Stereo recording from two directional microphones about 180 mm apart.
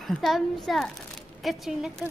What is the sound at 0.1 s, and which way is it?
A child's voice, centre (ahead or behind).